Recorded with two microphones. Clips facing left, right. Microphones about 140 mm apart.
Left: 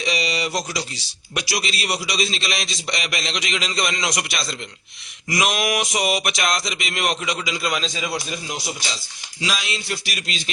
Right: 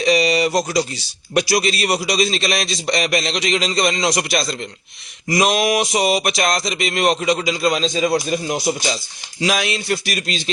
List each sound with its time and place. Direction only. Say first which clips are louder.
0.0 s a sound: right 9 dB; 45° right (ahead or behind)
1.3 s speech: right 9 dB; 45° right (ahead or behind)
9.4 s a man's voice: right 7 dB; 55° right (ahead or behind); by 10.5 s 35° right (ahead or behind)